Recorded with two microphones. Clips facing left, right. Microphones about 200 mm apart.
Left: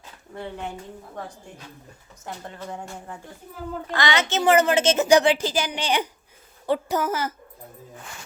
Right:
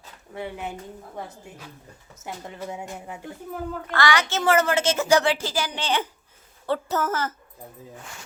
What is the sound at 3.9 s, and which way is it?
A woman's voice, 20° left (ahead or behind).